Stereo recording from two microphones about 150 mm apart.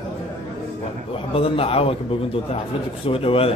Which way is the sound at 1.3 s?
40° left (ahead or behind).